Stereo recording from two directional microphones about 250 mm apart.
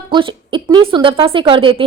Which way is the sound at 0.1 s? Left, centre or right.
Centre.